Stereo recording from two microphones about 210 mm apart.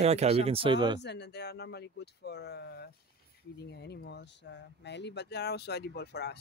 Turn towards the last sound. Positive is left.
turn(degrees=50)  # may be behind; listen again after turning